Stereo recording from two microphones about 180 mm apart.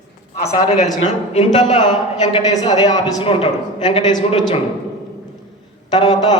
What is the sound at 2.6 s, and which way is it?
A man's voice, 20° left (ahead or behind).